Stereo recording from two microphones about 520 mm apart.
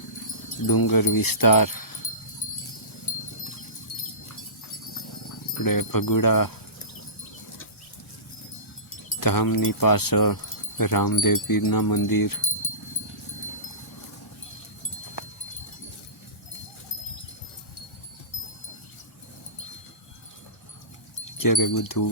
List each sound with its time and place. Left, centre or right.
0.7 s speech: left
3.1 s wind chime: left
5.5 s speech: left
9.2 s speech: left
21.3 s speech: left